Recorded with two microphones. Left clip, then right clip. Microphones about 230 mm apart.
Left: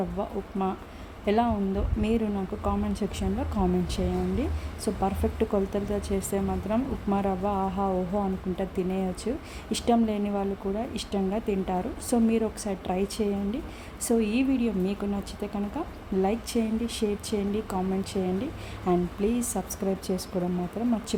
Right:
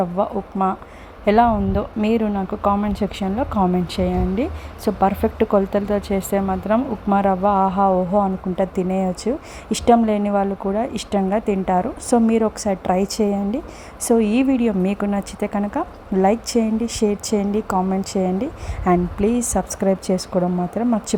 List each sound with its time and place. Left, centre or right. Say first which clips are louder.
0.2 s speech: right 10 dB; centre